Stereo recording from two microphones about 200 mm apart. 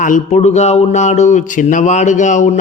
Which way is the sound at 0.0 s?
40° left (ahead or behind).